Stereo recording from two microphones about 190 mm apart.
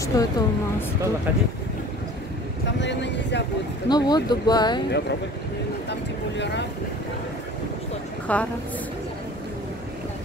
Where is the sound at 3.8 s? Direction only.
20° left (ahead or behind).